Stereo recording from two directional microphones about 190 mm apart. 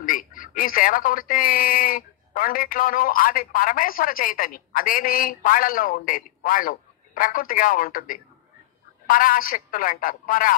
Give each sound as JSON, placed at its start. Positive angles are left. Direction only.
{"t": 0.0, "sound": "speech", "side_deg": 45}